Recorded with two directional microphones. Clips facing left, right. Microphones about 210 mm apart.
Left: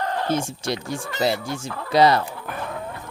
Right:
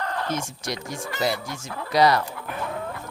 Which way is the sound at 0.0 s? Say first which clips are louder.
Left 4 dB; 30° left (ahead or behind).